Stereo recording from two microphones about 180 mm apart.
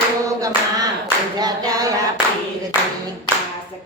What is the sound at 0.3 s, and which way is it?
Clapping, 20° right (ahead or behind).